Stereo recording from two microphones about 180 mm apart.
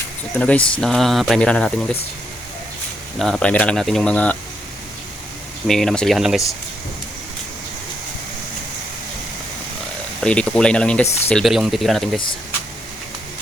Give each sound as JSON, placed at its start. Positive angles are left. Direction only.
{"t": 0.3, "sound": "speech", "side_deg": 5}
{"t": 3.2, "sound": "speech", "side_deg": 0}
{"t": 5.6, "sound": "speech", "side_deg": 0}
{"t": 10.2, "sound": "speech", "side_deg": 5}